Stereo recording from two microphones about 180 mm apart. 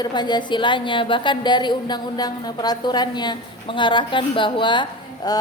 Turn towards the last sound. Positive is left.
turn(degrees=25)  # may be behind; listen again after turning